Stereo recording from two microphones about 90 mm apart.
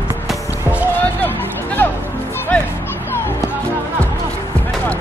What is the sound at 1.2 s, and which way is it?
Music, 20° left (ahead or behind).